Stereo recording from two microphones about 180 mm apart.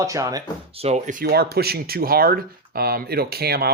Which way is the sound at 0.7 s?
35° right (ahead or behind).